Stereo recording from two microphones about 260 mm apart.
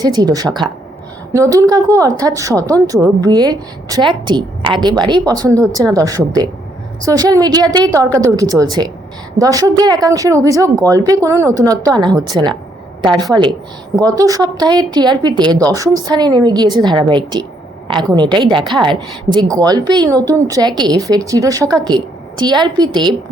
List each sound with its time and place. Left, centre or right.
0.0 s a woman's voice: centre